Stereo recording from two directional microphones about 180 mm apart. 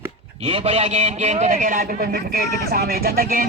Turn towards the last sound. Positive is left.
turn(degrees=-55)  # may be behind; listen again after turning